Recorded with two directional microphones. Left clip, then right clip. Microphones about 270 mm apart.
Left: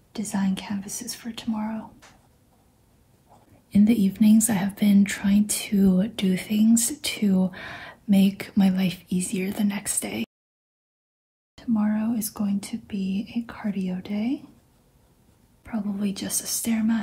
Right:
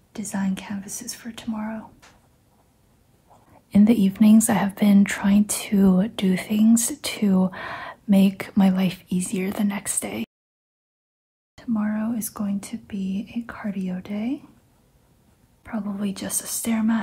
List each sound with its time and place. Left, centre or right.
0.1 s speech: centre
3.7 s speech: centre
11.5 s speech: centre
15.6 s speech: centre